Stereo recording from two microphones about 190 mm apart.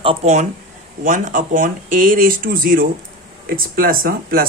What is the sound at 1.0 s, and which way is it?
Speech, 45° right (ahead or behind).